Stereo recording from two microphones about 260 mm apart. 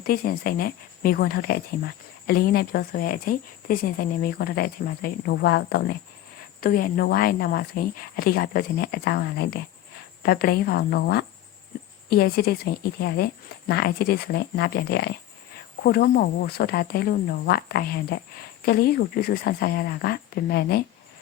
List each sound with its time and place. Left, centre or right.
0.0 s speech: left